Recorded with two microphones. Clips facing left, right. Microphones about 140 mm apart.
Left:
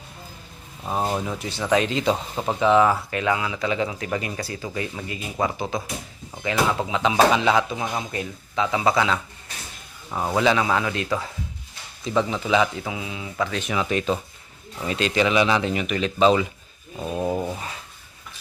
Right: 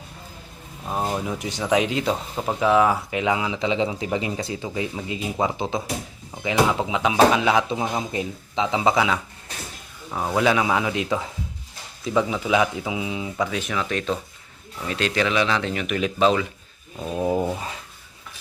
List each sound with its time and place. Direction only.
0.9 s speech: 5° left (ahead or behind)
1.4 s speech: 15° right (ahead or behind)
8.1 s speech: 20° right (ahead or behind)
10.1 s speech: centre (ahead or behind); by 11.3 s 15° right (ahead or behind)
12.0 s speech: 5° right (ahead or behind)
13.7 s speech: 5° left (ahead or behind)